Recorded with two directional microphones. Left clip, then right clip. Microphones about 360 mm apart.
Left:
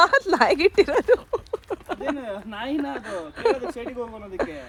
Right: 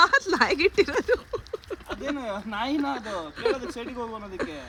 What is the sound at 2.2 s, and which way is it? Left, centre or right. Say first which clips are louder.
Speech: right 1 dB; centre.